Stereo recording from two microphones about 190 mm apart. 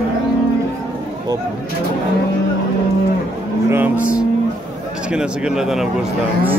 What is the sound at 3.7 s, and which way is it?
Speech, 10° right (ahead or behind).